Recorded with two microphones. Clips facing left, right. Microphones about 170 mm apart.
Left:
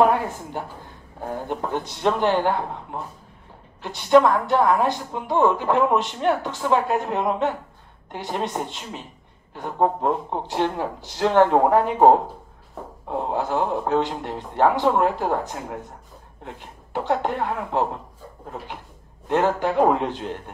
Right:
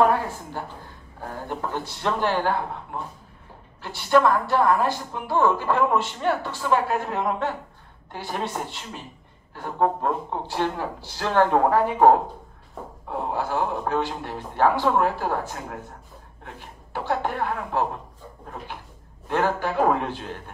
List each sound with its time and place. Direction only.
0.0 s a woman's voice: 20° left (ahead or behind)
19.2 s a woman's voice: 20° left (ahead or behind)